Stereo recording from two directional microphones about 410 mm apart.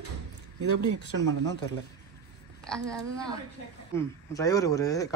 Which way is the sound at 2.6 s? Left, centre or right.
Centre.